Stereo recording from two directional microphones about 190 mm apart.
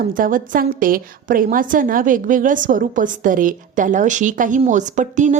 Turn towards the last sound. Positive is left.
turn(degrees=-40)  # may be behind; listen again after turning